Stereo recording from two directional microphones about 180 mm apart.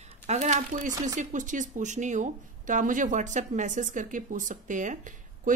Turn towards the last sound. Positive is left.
turn(degrees=-45)  # may be behind; listen again after turning